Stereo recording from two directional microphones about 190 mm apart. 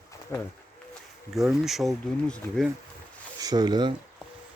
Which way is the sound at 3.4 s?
20° right (ahead or behind).